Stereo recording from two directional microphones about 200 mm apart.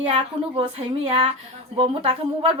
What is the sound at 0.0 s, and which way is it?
A woman's voice, 25° right (ahead or behind).